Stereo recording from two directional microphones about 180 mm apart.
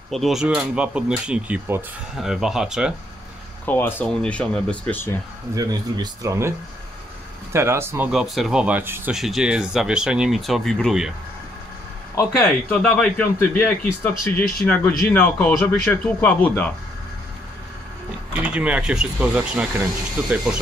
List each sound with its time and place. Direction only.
0.1 s speech: centre (ahead or behind)
3.6 s speech: 10° left (ahead or behind)
5.5 s speech: 20° right (ahead or behind)
7.5 s speech: 15° right (ahead or behind)
8.1 s speech: 5° right (ahead or behind)
12.3 s speech: centre (ahead or behind)
18.3 s speech: 5° right (ahead or behind)